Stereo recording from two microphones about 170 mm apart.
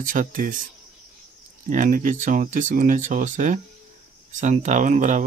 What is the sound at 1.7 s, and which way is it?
Speech, 50° right (ahead or behind).